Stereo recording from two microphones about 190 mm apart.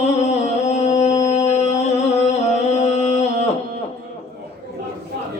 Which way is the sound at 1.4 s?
35° left (ahead or behind).